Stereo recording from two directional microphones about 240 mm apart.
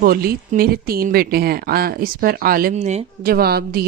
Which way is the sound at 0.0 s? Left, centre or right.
Right.